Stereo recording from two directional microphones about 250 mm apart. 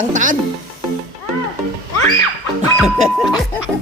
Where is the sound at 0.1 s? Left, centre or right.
Right.